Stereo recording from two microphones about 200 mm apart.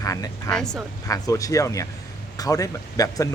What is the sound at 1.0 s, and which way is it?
Speech, 15° left (ahead or behind).